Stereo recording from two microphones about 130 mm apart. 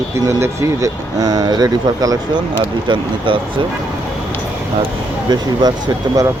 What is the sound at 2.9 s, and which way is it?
Speech, 40° right (ahead or behind).